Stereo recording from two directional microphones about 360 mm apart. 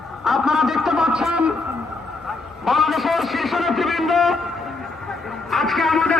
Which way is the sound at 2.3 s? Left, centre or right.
Centre.